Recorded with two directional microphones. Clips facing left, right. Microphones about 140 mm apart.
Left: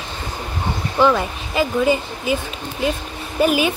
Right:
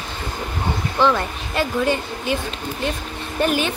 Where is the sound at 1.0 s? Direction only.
5° left (ahead or behind).